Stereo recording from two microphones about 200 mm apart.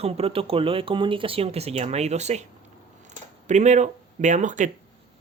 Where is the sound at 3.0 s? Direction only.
35° right (ahead or behind).